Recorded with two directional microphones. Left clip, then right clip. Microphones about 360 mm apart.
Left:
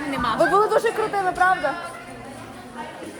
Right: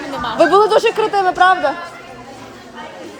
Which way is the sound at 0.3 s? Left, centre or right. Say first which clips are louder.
Right 8 dB; right.